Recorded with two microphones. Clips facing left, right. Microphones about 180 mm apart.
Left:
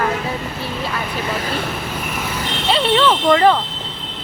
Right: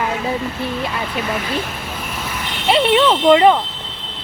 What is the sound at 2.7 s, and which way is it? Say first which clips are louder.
Speech: right 2 dB; 25° right (ahead or behind).